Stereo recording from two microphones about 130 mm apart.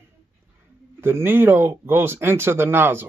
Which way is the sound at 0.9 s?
20° right (ahead or behind).